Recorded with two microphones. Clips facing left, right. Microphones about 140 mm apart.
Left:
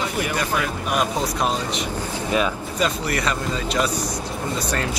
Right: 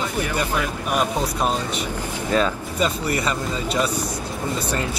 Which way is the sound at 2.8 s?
10° right (ahead or behind).